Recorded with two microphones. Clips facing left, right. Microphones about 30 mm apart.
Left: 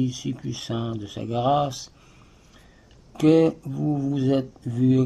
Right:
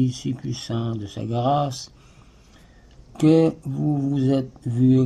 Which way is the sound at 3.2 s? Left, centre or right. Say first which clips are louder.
Right 1 dB; centre.